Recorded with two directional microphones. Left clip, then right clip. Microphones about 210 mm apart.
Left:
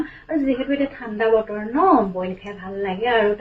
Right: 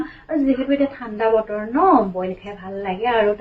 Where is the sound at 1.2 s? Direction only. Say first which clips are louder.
Even; centre (ahead or behind).